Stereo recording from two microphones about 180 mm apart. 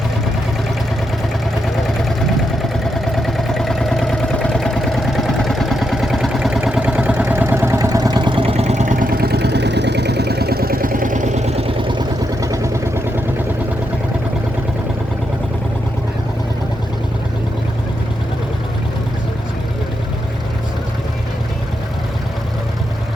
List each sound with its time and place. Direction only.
1.6 s vehicle: centre (ahead or behind); by 12.7 s 20° right (ahead or behind)